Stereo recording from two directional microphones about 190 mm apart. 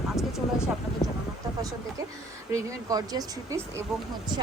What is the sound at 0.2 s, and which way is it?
Vehicle, centre (ahead or behind).